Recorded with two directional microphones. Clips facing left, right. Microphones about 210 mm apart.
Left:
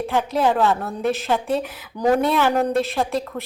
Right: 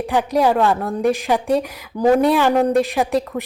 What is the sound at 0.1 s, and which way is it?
Speech, 15° right (ahead or behind).